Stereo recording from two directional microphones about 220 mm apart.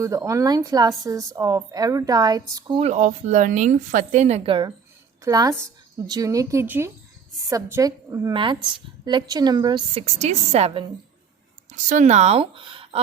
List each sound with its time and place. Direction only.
0.0 s a woman's voice: 15° right (ahead or behind)
10.2 s a woman's voice: 30° right (ahead or behind)